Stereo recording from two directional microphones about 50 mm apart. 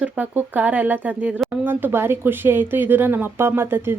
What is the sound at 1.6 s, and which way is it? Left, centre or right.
Speech, right.